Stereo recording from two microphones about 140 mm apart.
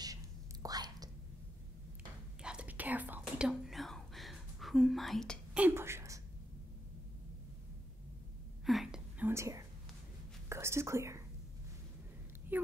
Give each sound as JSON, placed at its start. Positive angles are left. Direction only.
{"t": 0.0, "sound": "whispering", "side_deg": -25}
{"t": 2.4, "sound": "whispering", "side_deg": -10}
{"t": 5.5, "sound": "whispering", "side_deg": -10}
{"t": 8.6, "sound": "whispering", "side_deg": 0}
{"t": 9.3, "sound": "whispering", "side_deg": -20}
{"t": 12.5, "sound": "a sound", "side_deg": -10}